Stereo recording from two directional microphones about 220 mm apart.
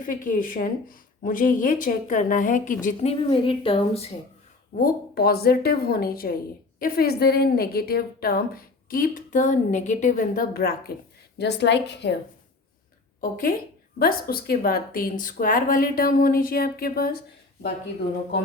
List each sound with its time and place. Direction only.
0.0 s a woman's voice: 40° left (ahead or behind)
4.7 s a woman's voice: 40° left (ahead or behind)
13.3 s a woman's voice: 40° left (ahead or behind)